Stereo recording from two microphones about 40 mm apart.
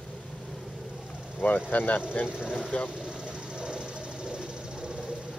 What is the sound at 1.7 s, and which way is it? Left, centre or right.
Speech, left.